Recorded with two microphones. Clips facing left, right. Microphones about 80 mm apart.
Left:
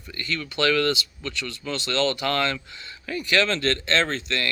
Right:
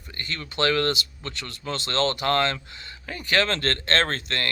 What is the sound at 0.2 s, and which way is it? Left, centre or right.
Speech, right.